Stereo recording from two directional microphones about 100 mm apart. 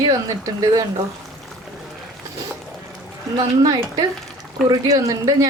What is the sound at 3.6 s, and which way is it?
A woman's voice, 40° right (ahead or behind).